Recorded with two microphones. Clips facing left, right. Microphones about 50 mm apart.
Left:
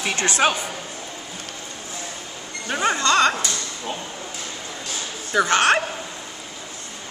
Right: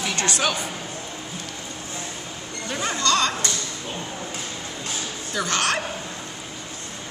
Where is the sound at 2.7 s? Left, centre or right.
Left.